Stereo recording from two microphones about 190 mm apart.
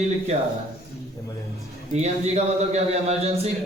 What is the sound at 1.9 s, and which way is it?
Speech, 35° right (ahead or behind).